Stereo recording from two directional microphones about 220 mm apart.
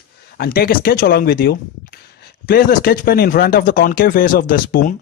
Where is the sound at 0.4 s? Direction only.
40° left (ahead or behind).